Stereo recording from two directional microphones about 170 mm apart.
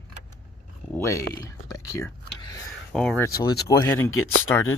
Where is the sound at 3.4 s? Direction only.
20° left (ahead or behind).